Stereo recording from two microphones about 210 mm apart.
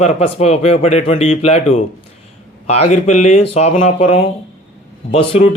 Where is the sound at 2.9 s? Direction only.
35° left (ahead or behind).